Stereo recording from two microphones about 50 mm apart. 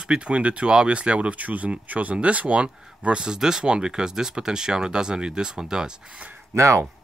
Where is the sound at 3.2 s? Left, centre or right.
Centre.